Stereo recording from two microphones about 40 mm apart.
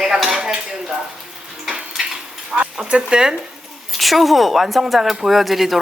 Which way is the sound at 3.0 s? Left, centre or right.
Centre.